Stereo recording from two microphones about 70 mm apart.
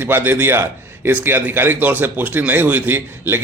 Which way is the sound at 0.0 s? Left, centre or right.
Right.